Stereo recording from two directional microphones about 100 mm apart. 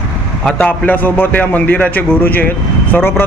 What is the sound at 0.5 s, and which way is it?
A man's voice, 15° left (ahead or behind).